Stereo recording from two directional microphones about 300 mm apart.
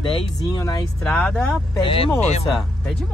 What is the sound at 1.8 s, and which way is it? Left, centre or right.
Speech, centre.